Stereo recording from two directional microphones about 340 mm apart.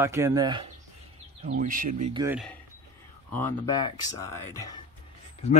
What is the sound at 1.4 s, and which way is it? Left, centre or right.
Speech, right.